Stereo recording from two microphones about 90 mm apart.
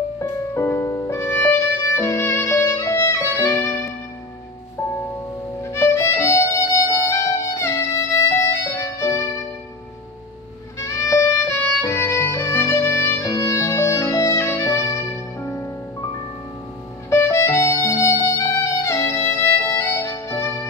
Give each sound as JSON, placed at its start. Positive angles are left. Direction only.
{"t": 0.2, "sound": "music", "side_deg": 35}
{"t": 5.6, "sound": "violin", "side_deg": 30}
{"t": 10.8, "sound": "music", "side_deg": 30}
{"t": 11.8, "sound": "violin", "side_deg": 30}
{"t": 13.3, "sound": "music", "side_deg": 40}
{"t": 17.1, "sound": "music", "side_deg": 30}